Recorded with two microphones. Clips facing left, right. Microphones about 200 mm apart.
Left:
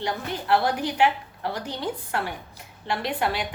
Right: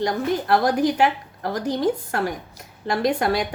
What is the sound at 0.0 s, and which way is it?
A woman's voice, 40° right (ahead or behind).